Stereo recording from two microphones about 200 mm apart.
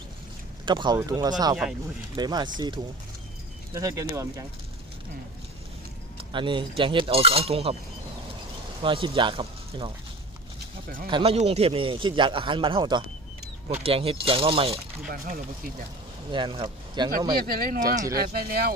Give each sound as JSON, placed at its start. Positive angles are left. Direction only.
{"t": 0.6, "sound": "a man's voice", "side_deg": -20}
{"t": 6.3, "sound": "a man's voice", "side_deg": -25}
{"t": 8.8, "sound": "speech", "side_deg": -25}
{"t": 11.1, "sound": "a man's voice", "side_deg": -30}
{"t": 15.0, "sound": "speech", "side_deg": -45}
{"t": 16.3, "sound": "speech", "side_deg": -25}
{"t": 17.3, "sound": "speech", "side_deg": -50}